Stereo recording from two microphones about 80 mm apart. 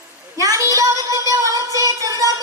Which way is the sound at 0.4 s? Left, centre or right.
Right.